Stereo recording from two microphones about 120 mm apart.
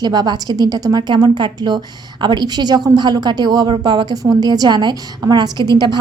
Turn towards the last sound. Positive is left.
turn(degrees=-35)  # may be behind; listen again after turning